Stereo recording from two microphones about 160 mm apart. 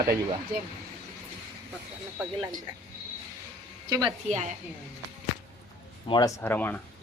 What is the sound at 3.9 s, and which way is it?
Speech, 25° right (ahead or behind).